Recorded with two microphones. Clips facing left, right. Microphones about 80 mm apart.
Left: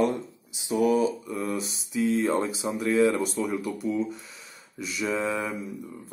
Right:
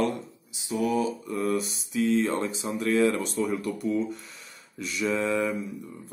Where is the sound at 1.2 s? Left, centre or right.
Centre.